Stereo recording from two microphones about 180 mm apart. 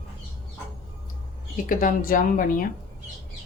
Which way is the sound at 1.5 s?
50° left (ahead or behind).